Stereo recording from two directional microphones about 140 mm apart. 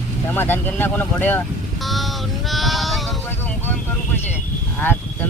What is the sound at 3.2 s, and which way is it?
Vehicle, 15° left (ahead or behind).